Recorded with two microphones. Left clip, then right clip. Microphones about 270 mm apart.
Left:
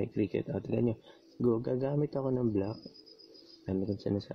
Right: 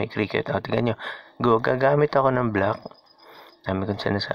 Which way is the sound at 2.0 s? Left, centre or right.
Right.